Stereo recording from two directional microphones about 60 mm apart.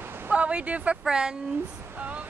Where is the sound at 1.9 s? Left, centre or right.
Right.